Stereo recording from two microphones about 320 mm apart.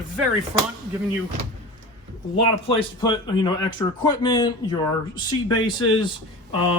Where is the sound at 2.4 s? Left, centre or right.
Centre.